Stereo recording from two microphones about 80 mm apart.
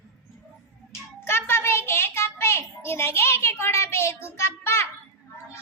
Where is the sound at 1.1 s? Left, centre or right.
Left.